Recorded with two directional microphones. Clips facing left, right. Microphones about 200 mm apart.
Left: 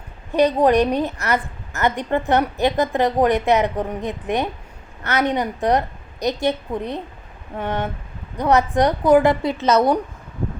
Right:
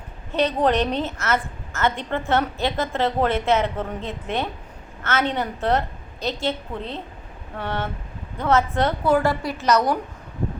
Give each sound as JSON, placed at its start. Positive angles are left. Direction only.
{"t": 0.3, "sound": "a woman's voice", "side_deg": 10}